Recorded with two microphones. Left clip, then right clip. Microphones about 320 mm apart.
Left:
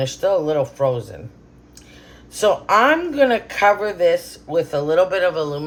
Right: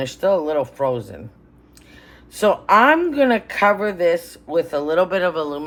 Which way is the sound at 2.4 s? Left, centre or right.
Right.